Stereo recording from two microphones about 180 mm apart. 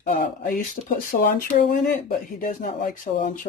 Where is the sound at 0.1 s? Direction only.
50° left (ahead or behind).